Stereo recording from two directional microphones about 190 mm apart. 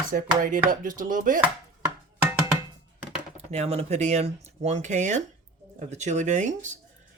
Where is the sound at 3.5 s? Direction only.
30° right (ahead or behind).